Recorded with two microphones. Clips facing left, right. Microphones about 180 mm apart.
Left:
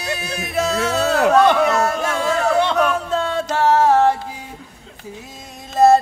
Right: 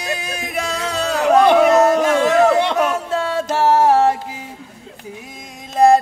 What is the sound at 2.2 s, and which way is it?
Speech, 90° right.